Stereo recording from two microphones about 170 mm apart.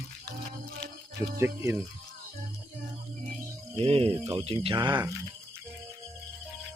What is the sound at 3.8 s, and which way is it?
Speech, 35° right (ahead or behind).